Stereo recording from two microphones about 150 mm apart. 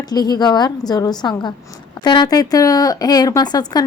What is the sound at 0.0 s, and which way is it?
Speech, 25° left (ahead or behind).